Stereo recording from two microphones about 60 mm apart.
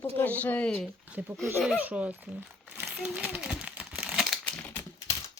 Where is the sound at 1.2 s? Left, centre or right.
Right.